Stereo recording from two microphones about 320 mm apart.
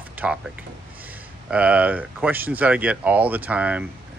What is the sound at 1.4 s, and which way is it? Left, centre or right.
Speech, centre.